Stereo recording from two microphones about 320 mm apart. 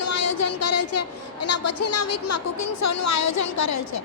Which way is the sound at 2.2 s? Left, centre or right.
Left.